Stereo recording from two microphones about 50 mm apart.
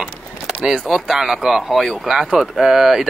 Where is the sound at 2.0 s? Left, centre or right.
Centre.